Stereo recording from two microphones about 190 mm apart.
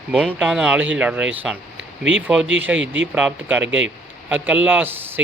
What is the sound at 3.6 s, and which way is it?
Speech, 80° right.